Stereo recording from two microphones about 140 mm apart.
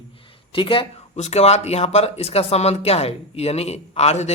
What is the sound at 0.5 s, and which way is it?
Speech, 40° left (ahead or behind).